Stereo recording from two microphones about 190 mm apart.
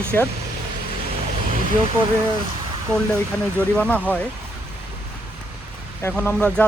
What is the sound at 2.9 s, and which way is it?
Speech, 5° left (ahead or behind).